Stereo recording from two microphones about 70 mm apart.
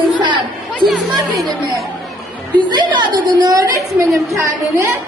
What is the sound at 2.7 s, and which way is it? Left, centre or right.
A woman's voice, right.